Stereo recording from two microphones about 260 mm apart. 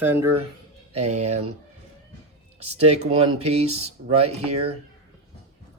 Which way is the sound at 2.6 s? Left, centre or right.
Right.